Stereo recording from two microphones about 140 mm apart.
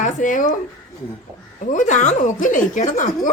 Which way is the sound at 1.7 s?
60° left (ahead or behind).